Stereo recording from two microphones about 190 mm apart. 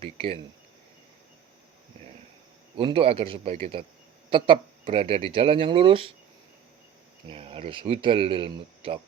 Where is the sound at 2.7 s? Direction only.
30° right (ahead or behind).